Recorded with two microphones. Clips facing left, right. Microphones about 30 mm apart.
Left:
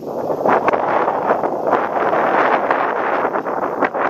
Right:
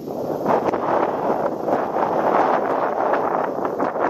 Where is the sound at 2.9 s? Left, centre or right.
Left.